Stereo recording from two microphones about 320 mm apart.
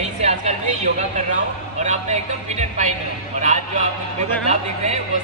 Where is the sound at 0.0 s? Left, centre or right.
Right.